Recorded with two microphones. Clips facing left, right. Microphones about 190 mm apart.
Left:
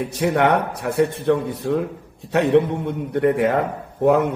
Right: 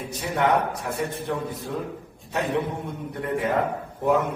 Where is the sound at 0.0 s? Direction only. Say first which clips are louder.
Left 6 dB; 70° left (ahead or behind).